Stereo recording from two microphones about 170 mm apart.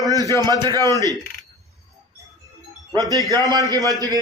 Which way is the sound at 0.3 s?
15° left (ahead or behind).